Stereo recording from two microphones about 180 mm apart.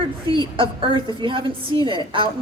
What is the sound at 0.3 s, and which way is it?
A woman's voice, 30° right (ahead or behind).